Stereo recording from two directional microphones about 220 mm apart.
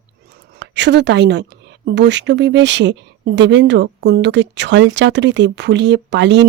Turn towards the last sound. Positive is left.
turn(degrees=-55)  # may be behind; listen again after turning